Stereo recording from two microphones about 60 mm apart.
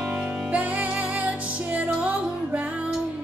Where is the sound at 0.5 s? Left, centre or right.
Right.